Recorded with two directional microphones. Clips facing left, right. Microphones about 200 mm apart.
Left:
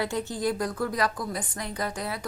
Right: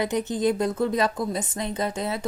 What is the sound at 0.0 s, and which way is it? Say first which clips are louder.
A woman's voice: right 4 dB; 20° right (ahead or behind).